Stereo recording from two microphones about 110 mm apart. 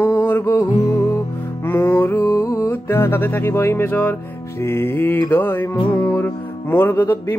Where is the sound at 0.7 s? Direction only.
35° left (ahead or behind).